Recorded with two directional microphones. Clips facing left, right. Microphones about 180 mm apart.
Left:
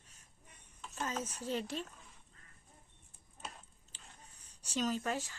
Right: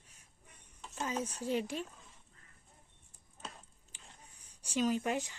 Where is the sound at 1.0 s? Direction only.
10° right (ahead or behind).